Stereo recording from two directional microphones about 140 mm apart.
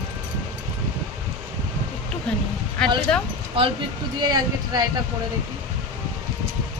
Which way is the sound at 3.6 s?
45° right (ahead or behind).